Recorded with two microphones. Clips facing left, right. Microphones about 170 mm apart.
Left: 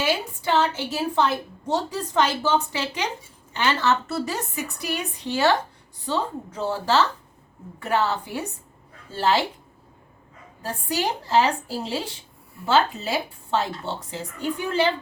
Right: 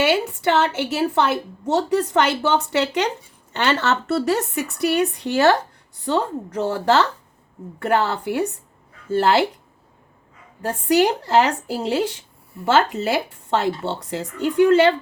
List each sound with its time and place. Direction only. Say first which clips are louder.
0.0 s a woman's voice: right 6 dB; 75° right (ahead or behind)
10.8 s a woman's voice: right 9 dB; 75° right (ahead or behind)
14.1 s a woman's voice: right 5 dB; 85° right